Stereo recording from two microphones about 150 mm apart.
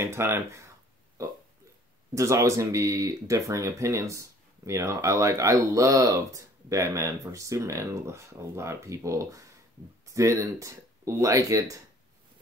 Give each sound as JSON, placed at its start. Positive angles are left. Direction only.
{"t": 0.0, "sound": "speech", "side_deg": -15}